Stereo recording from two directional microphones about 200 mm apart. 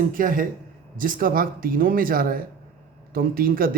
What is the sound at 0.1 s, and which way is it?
Speech, 45° right (ahead or behind).